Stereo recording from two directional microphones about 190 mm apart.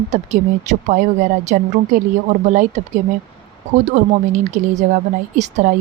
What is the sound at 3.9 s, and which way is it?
Speech, 45° right (ahead or behind).